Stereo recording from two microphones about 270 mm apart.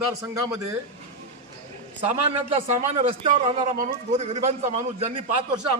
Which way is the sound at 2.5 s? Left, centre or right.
Right.